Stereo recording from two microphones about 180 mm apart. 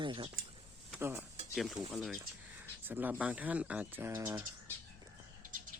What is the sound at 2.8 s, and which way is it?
Speech, 10° right (ahead or behind).